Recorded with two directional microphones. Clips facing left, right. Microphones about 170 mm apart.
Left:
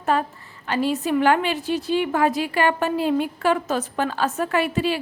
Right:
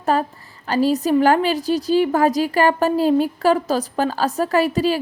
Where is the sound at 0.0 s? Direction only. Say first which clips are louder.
Right 2 dB; 35° right (ahead or behind).